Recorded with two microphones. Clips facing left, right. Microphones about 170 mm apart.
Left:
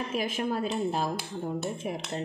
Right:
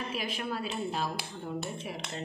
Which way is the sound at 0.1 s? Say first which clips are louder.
Left 5 dB; 50° left (ahead or behind).